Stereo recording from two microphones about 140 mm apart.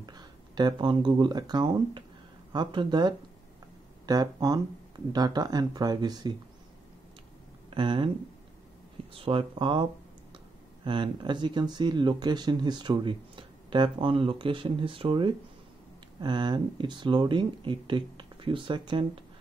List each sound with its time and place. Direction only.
0.0 s speech: 30° right (ahead or behind)
7.7 s speech: 35° right (ahead or behind)
9.1 s speech: 40° right (ahead or behind)